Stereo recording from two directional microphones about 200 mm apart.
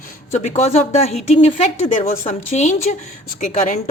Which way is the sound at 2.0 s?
40° left (ahead or behind).